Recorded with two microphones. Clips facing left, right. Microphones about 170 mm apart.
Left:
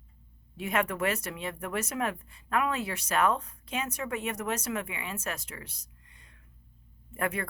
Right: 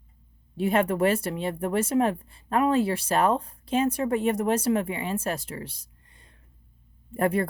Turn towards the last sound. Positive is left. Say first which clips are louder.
# right 8 dB
turn(degrees=-35)  # may be behind; listen again after turning